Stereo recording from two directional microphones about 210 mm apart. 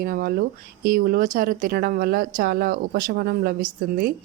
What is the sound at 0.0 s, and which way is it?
Speech, 40° right (ahead or behind).